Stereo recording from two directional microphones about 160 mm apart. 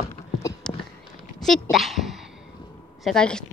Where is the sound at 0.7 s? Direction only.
5° left (ahead or behind).